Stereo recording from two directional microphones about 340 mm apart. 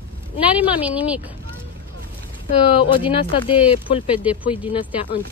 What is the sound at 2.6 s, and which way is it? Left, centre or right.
Speech, centre.